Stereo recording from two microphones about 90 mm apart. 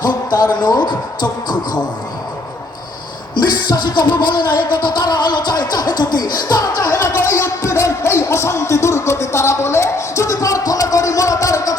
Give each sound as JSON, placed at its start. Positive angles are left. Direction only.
{"t": 0.0, "sound": "music", "side_deg": 50}
{"t": 3.3, "sound": "music", "side_deg": 55}
{"t": 7.2, "sound": "a sound", "side_deg": 30}